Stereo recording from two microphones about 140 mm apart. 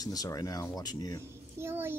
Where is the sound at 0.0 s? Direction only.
25° left (ahead or behind).